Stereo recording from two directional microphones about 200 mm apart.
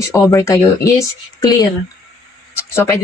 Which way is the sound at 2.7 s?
15° left (ahead or behind).